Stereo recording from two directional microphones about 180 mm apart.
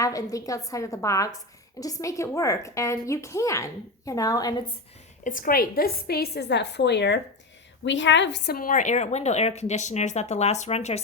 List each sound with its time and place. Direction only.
0.0 s a woman's voice: 20° left (ahead or behind)
5.2 s a woman's voice: 50° left (ahead or behind); by 7.2 s 70° left (ahead or behind)
7.9 s a woman's voice: 90° left; by 11.0 s 35° left (ahead or behind)